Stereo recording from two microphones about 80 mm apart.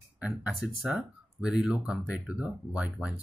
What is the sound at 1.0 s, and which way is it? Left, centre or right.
Speech, centre.